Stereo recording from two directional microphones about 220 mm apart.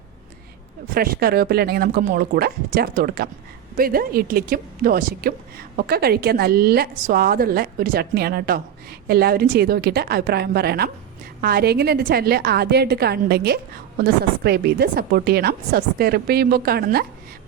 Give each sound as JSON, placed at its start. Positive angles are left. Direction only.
{"t": 0.9, "sound": "a woman's voice", "side_deg": -40}